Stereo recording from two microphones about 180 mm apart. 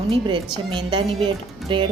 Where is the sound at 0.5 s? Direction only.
25° right (ahead or behind).